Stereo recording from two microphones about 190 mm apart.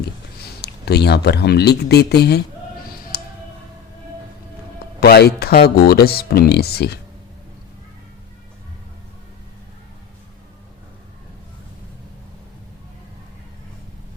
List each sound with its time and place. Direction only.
0.6 s speech: 60° left (ahead or behind)
3.1 s music: 55° left (ahead or behind)
4.9 s speech: 55° left (ahead or behind)